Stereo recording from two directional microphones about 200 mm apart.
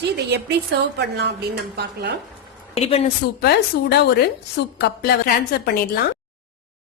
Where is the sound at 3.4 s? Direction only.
55° left (ahead or behind).